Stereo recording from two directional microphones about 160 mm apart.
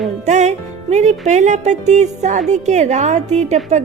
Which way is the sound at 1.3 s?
50° right (ahead or behind).